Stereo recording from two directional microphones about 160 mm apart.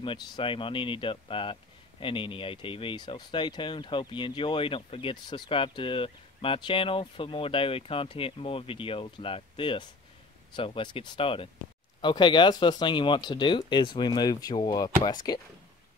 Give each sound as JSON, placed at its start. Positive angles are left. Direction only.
{"t": 0.0, "sound": "speech", "side_deg": 35}